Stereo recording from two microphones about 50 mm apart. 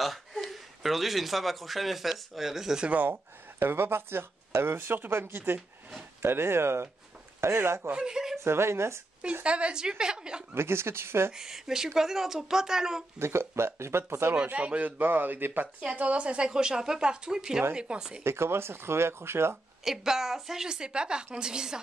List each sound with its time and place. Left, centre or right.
0.0 s speech: centre
3.0 s speech: right
7.9 s speech: centre
8.5 s speech: right
9.2 s speech: right
10.5 s speech: right
11.3 s speech: centre
13.2 s speech: right
14.3 s speech: right
16.0 s speech: right
18.2 s speech: right
19.8 s speech: centre